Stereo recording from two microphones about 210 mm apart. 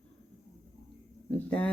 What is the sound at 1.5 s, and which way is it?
Speech, 5° left (ahead or behind).